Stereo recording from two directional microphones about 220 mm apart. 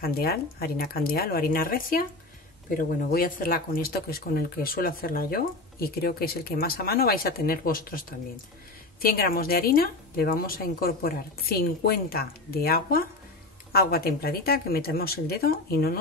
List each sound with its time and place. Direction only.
0.0 s speech: 45° left (ahead or behind)
9.0 s speech: 40° left (ahead or behind)